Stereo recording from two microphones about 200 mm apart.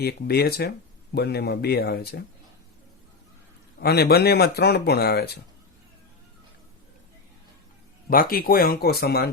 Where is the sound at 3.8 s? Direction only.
50° left (ahead or behind).